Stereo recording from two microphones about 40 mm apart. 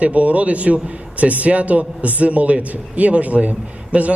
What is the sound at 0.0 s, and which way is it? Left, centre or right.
A man's voice, right.